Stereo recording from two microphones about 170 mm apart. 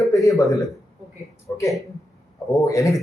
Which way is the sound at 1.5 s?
20° left (ahead or behind).